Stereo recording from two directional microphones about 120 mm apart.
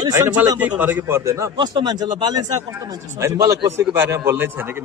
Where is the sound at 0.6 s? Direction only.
15° right (ahead or behind).